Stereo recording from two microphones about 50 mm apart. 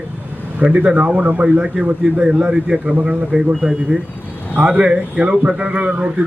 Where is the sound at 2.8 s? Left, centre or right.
Right.